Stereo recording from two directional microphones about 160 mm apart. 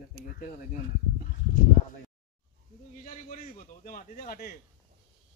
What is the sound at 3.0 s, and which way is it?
A man's voice, 45° left (ahead or behind).